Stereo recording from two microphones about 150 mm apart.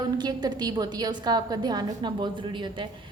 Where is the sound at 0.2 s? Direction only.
30° right (ahead or behind).